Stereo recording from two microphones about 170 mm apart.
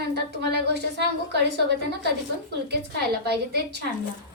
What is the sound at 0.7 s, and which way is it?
A woman's voice, 85° right.